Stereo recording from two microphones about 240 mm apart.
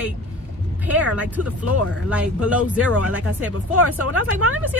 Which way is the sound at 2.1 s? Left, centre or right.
Centre.